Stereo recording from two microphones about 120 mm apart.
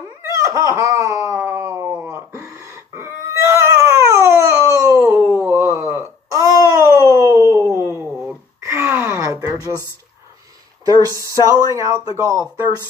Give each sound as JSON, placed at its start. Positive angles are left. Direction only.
{"t": 0.5, "sound": "fowl", "side_deg": -25}
{"t": 2.0, "sound": "a sound", "side_deg": -25}
{"t": 10.9, "sound": "speech", "side_deg": -30}